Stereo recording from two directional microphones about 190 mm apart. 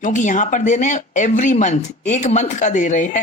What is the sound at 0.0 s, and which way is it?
Speech, 40° left (ahead or behind).